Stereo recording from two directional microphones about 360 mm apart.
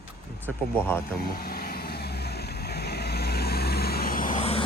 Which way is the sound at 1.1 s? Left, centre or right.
Left.